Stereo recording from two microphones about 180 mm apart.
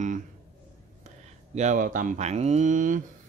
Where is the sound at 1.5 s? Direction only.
40° right (ahead or behind).